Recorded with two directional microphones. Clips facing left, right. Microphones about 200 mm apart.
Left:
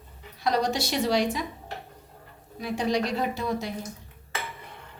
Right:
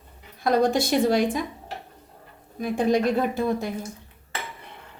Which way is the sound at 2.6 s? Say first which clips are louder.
Right 5 dB; 50° right (ahead or behind).